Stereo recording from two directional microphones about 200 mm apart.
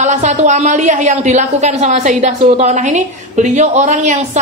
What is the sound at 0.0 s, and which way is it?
A woman's voice, 35° right (ahead or behind).